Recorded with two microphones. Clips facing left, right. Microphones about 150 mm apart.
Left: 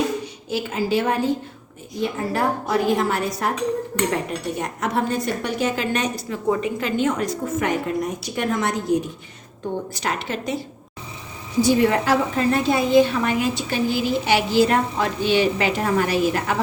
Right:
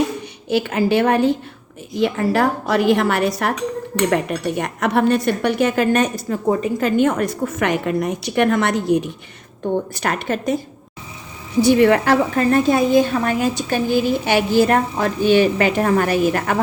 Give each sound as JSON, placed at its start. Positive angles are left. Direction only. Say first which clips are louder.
{"t": 0.5, "sound": "a woman's voice", "louder": "right 5 dB", "side_deg": -70}
{"t": 2.0, "sound": "a woman's voice", "louder": "right 6 dB", "side_deg": -85}
{"t": 9.9, "sound": "a woman's voice", "louder": "right 4 dB", "side_deg": -55}
{"t": 11.6, "sound": "a woman's voice", "louder": "right 5 dB", "side_deg": -65}